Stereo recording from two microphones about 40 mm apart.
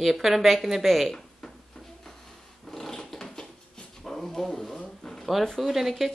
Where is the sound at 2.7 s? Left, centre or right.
Centre.